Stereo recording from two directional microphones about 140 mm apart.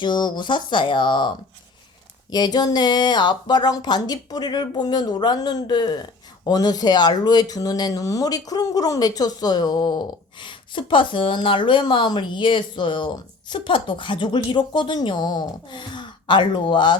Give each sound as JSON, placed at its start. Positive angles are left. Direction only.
{"t": 0.0, "sound": "a woman's voice", "side_deg": 35}
{"t": 2.3, "sound": "a woman's voice", "side_deg": 30}